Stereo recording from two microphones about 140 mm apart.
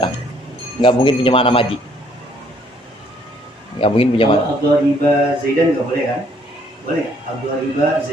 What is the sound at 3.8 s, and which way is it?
Speech, 40° left (ahead or behind).